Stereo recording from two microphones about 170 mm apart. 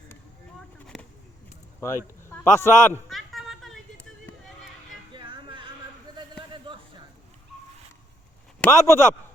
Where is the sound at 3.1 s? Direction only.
Centre (ahead or behind).